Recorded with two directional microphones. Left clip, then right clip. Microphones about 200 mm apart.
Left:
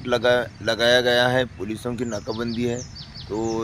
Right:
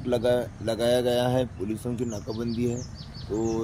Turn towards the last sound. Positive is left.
turn(degrees=35)  # may be behind; listen again after turning